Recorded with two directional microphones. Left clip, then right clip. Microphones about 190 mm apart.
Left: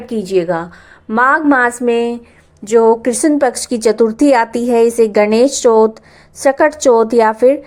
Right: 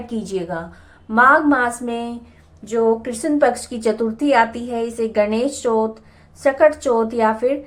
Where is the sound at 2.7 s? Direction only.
50° left (ahead or behind).